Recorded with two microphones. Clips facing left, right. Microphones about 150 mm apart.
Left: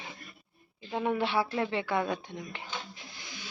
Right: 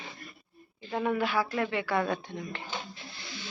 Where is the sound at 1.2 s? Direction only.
30° left (ahead or behind).